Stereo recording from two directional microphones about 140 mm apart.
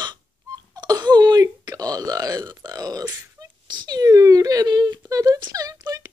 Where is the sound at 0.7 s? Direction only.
30° right (ahead or behind).